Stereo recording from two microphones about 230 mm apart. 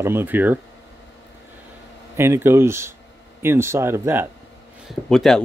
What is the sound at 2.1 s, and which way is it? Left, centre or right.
Speech, centre.